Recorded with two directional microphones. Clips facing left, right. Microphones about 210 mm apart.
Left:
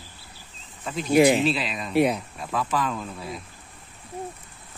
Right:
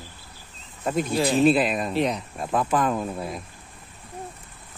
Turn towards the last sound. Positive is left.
turn(degrees=-50)  # may be behind; listen again after turning